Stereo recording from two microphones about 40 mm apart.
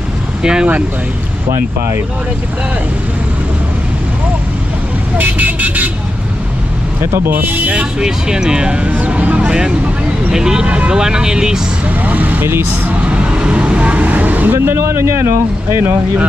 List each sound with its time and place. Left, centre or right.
0.4 s speech: right
5.1 s speech: right
7.2 s speech: right
8.0 s speech: centre
9.1 s a sound: right
10.3 s speech: centre
11.9 s speech: right
12.4 s speech: right
13.0 s vehicle: right
14.5 s speech: right